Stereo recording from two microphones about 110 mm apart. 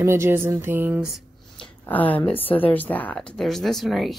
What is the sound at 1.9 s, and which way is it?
A woman's voice, 15° left (ahead or behind).